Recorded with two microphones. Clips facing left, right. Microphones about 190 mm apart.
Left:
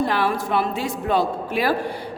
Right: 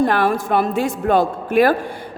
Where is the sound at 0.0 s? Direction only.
50° right (ahead or behind).